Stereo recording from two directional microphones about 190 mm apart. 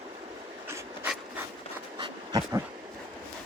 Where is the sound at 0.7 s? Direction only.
10° right (ahead or behind).